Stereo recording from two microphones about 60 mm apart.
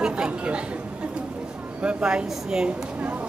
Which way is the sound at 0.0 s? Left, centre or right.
Centre.